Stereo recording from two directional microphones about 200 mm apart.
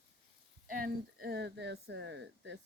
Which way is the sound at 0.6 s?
45° right (ahead or behind).